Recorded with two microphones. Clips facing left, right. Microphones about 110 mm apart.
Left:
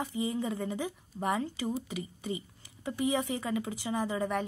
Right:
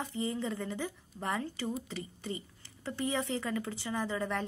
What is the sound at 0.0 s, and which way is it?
A woman's voice, 15° left (ahead or behind).